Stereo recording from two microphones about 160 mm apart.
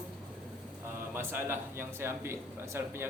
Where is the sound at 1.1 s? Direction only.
15° right (ahead or behind).